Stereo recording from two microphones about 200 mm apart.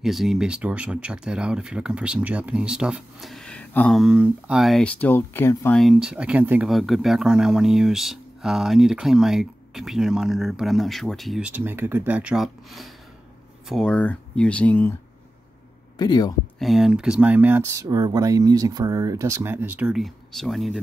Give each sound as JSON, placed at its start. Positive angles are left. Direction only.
{"t": 0.0, "sound": "speech", "side_deg": 0}
{"t": 5.8, "sound": "speech", "side_deg": 0}
{"t": 16.0, "sound": "speech", "side_deg": 20}
{"t": 16.5, "sound": "speech", "side_deg": 0}